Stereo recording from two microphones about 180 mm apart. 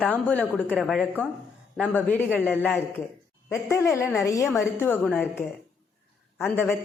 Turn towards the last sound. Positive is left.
turn(degrees=15)  # may be behind; listen again after turning